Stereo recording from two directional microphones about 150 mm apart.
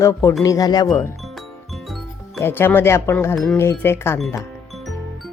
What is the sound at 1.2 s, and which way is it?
Music, centre (ahead or behind).